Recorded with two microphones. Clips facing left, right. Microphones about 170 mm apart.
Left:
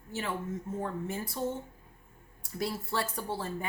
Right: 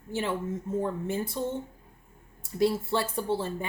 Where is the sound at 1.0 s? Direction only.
25° right (ahead or behind).